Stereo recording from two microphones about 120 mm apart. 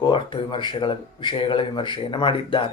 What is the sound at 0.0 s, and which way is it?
Speech, 45° left (ahead or behind).